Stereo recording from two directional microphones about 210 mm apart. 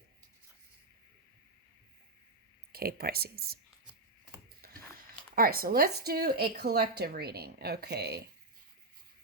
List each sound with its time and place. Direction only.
2.7 s a woman's voice: 45° right (ahead or behind)
4.6 s a sound: 50° right (ahead or behind)
5.3 s a woman's voice: 45° right (ahead or behind)